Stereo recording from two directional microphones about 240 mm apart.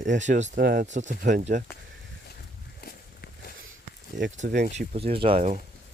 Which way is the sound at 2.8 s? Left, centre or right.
Left.